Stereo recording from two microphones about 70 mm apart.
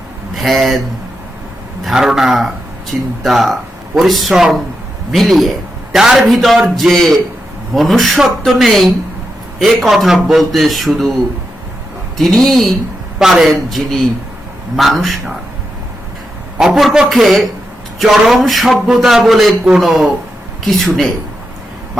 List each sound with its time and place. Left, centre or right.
0.3 s a man's voice: centre
1.8 s a man's voice: centre
2.9 s speech: centre
3.2 s a man's voice: centre
12.4 s a man's voice: centre
13.1 s a man's voice: centre
16.6 s a man's voice: centre